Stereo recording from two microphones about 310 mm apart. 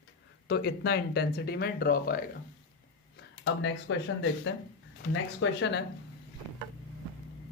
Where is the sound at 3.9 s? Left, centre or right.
Left.